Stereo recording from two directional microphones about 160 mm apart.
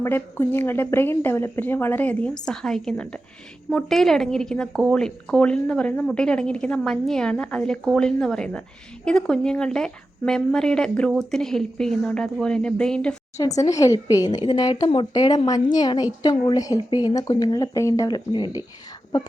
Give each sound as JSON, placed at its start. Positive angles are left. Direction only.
{"t": 0.0, "sound": "a woman's voice", "side_deg": 15}
{"t": 13.6, "sound": "speech", "side_deg": 20}